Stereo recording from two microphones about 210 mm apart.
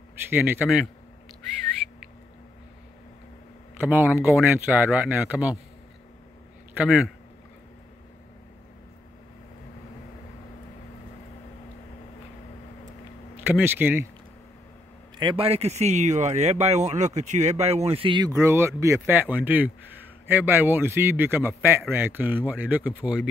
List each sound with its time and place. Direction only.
0.3 s a man's voice: 10° right (ahead or behind)
3.8 s a man's voice: 10° right (ahead or behind)
6.8 s a man's voice: 5° right (ahead or behind)
13.5 s a man's voice: 10° right (ahead or behind)
15.1 s a man's voice: 25° right (ahead or behind); by 23.2 s 5° right (ahead or behind)